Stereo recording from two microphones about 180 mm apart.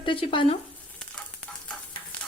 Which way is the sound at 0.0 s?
30° left (ahead or behind).